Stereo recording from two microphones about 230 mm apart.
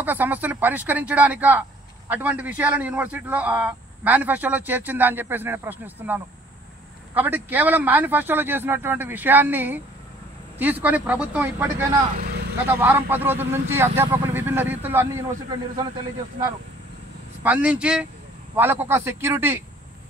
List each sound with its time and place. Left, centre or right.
0.0 s speech: centre
12.2 s vehicle: right
12.6 s speech: centre
17.4 s a man's voice: centre